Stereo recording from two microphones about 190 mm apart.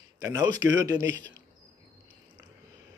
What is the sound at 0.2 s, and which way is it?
Speech, 15° right (ahead or behind).